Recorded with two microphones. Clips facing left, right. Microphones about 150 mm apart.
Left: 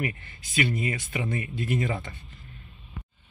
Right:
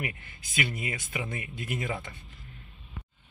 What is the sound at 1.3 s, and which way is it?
Speech, 15° right (ahead or behind).